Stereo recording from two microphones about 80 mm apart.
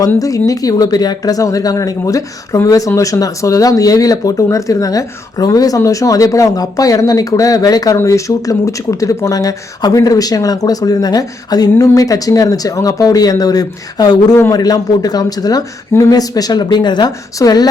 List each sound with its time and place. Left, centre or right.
0.2 s speech: left
15.9 s speech: left
16.1 s speech: left
17.3 s speech: left